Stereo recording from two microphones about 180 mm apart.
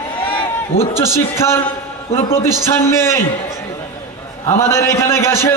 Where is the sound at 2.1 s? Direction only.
30° left (ahead or behind).